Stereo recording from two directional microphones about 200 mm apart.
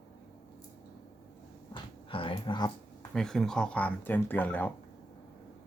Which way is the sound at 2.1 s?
25° left (ahead or behind).